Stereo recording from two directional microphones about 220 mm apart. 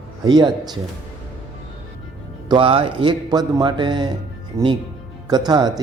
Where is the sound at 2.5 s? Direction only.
25° right (ahead or behind).